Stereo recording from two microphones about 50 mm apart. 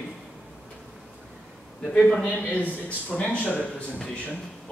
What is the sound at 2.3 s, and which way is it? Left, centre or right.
A man's voice, left.